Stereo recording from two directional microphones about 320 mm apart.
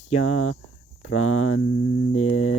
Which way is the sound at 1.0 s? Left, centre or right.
Left.